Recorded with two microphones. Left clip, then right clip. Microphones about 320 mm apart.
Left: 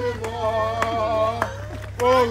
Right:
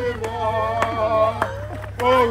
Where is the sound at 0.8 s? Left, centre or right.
Right.